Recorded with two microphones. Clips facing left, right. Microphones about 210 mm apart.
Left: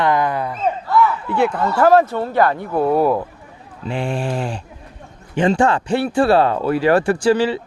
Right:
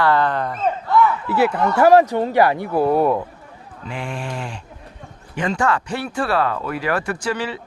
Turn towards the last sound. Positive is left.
turn(degrees=30)  # may be behind; listen again after turning